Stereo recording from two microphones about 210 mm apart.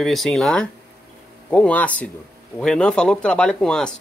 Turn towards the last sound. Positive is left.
turn(degrees=5)  # may be behind; listen again after turning